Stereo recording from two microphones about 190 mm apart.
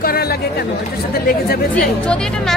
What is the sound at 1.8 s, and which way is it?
Speech, 5° left (ahead or behind).